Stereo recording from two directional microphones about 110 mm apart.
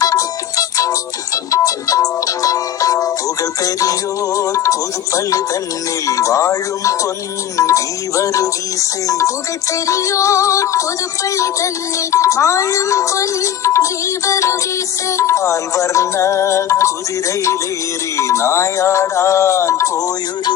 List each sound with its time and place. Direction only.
0.0 s music: 30° left (ahead or behind)
18.2 s music: 25° left (ahead or behind)